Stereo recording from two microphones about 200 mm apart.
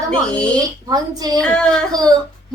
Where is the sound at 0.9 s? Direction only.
20° right (ahead or behind).